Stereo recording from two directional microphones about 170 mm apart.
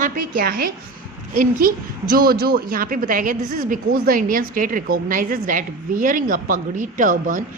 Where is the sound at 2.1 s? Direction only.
60° right (ahead or behind).